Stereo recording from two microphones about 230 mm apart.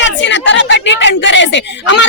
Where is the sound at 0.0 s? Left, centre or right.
Left.